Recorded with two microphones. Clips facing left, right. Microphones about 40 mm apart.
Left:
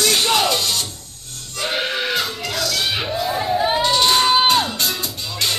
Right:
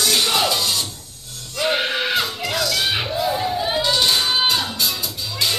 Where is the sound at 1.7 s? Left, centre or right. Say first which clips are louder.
Right 1 dB; centre.